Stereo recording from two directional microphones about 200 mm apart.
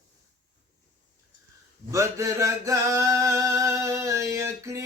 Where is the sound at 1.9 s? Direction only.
15° right (ahead or behind).